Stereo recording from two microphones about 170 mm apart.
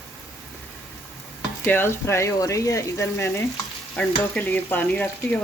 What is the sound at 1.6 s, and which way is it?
Frying, 15° left (ahead or behind).